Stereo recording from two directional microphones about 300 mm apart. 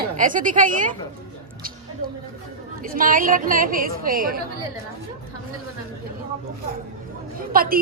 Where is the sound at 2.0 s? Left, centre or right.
Right.